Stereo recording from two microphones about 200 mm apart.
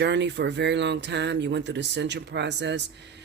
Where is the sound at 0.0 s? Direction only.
60° right (ahead or behind).